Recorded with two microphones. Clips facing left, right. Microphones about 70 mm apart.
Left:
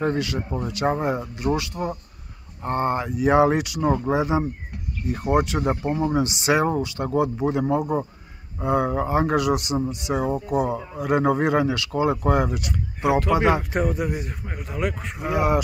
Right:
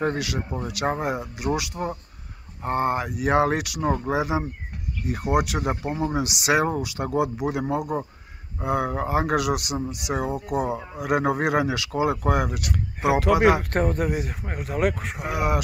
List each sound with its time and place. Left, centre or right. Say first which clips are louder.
0.0 s speech: left 2 dB; centre
13.2 s speech: right 2 dB; right
13.7 s speech: even; right
14.6 s speech: right 3 dB; right
15.0 s speech: left 3 dB; centre